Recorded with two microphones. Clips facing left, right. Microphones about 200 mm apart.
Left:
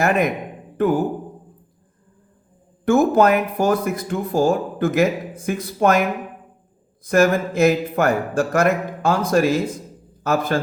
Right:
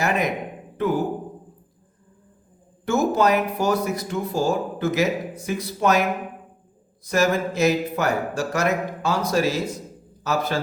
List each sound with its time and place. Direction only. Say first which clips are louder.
0.0 s speech: left 4 dB; 50° left (ahead or behind)
2.8 s speech: left 5 dB; 55° left (ahead or behind)